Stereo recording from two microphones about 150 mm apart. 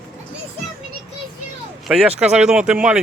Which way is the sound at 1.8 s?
5° right (ahead or behind).